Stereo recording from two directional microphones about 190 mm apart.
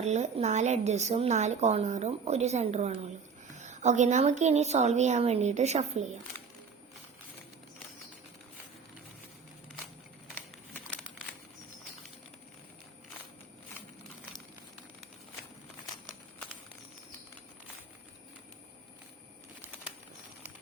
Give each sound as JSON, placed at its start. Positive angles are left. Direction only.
{"t": 0.0, "sound": "a woman's voice", "side_deg": -35}